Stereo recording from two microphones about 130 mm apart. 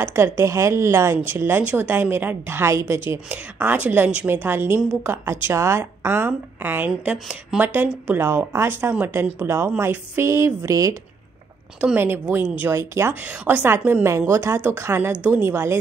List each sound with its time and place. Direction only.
0.0 s a woman's voice: 20° right (ahead or behind)
11.8 s a woman's voice: 15° right (ahead or behind)